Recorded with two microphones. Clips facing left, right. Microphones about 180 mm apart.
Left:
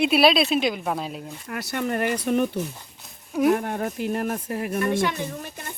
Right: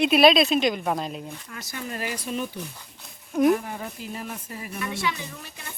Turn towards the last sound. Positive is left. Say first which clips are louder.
# left 7 dB
turn(degrees=50)  # may be behind; listen again after turning